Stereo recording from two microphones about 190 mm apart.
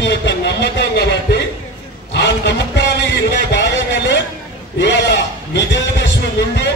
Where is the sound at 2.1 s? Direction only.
65° left (ahead or behind).